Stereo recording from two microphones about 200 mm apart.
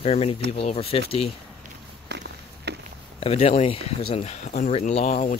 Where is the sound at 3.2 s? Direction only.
30° left (ahead or behind).